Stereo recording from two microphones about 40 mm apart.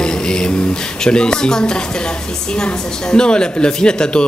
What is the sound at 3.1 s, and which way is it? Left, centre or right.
A man's voice, left.